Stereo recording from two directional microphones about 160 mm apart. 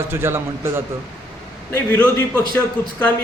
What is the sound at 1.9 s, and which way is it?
A man's voice, 10° left (ahead or behind).